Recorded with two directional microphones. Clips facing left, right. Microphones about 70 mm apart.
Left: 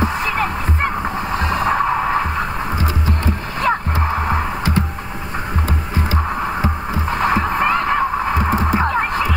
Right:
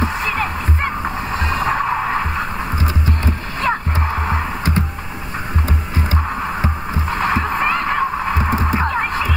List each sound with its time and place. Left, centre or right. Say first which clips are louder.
0.0 s music: left 1 dB; left
1.3 s vehicle: left 1 dB; left
1.9 s vehicle: left 1 dB; centre
3.6 s music: left 1 dB; left
7.1 s heart murmur: left 1 dB; left